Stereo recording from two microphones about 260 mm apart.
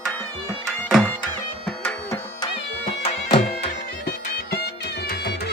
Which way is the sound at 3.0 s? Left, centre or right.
Left.